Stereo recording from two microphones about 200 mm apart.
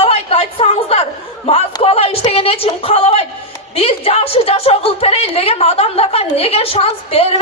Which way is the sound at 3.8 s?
30° left (ahead or behind).